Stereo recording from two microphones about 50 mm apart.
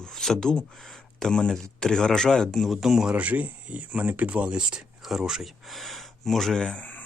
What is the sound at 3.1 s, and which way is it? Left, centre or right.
Speech, right.